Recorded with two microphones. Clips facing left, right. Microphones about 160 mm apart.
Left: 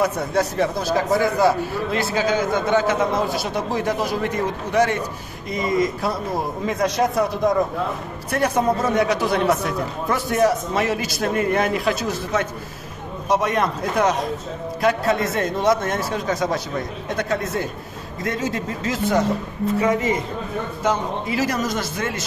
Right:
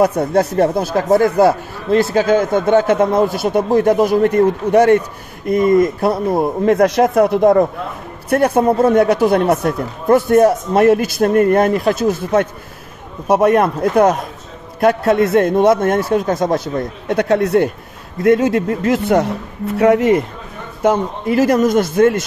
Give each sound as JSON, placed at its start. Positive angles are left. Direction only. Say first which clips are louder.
{"t": 0.3, "sound": "a man's voice", "louder": "right 7 dB", "side_deg": -55}
{"t": 19.8, "sound": "a man's voice", "louder": "right 11 dB", "side_deg": -70}
{"t": 20.8, "sound": "speech", "louder": "right 8 dB", "side_deg": -55}